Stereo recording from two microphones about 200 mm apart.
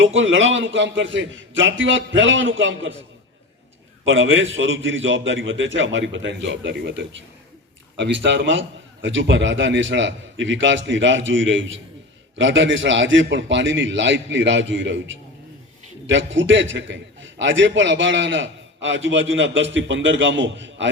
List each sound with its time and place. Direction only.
0.0 s a man's voice: 75° right (ahead or behind)
4.0 s a man's voice: 75° right (ahead or behind)